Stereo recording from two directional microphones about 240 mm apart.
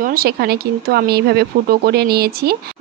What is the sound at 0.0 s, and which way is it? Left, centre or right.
Speech, right.